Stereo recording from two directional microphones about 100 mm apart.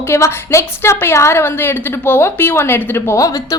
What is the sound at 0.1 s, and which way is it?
A woman's voice, 25° left (ahead or behind).